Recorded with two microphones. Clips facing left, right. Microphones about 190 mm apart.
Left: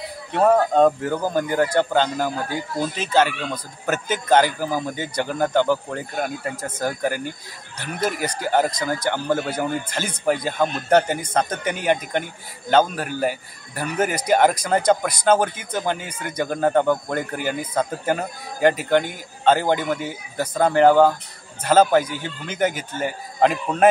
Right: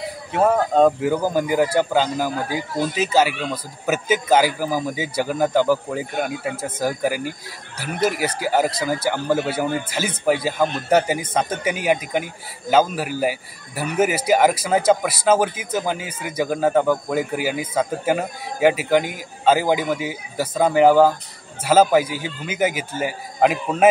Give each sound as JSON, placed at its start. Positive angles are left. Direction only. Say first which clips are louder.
{"t": 0.3, "sound": "speech", "louder": "left 1 dB", "side_deg": -5}